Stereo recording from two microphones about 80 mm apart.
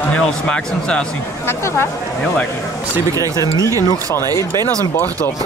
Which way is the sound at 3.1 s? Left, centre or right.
Right.